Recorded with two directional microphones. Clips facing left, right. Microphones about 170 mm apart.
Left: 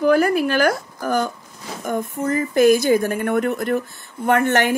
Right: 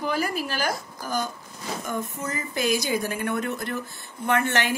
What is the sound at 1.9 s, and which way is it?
Speech, 55° left (ahead or behind).